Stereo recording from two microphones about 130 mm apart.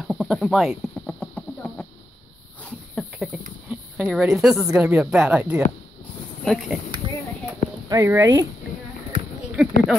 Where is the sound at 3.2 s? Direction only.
5° left (ahead or behind).